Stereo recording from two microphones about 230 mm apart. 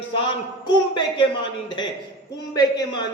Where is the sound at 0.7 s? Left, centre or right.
Centre.